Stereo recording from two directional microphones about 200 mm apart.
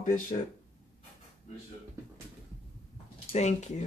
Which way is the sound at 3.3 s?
35° left (ahead or behind).